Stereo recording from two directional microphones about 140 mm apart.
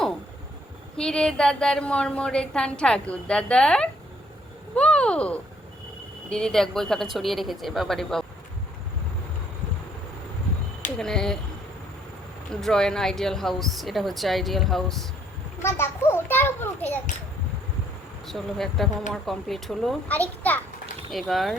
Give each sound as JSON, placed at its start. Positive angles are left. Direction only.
{"t": 0.9, "sound": "a woman's voice", "side_deg": 5}
{"t": 10.9, "sound": "speech", "side_deg": 5}
{"t": 12.5, "sound": "speech", "side_deg": 5}
{"t": 15.6, "sound": "children playing", "side_deg": 15}
{"t": 18.3, "sound": "a woman's voice", "side_deg": 0}
{"t": 21.1, "sound": "speech", "side_deg": 0}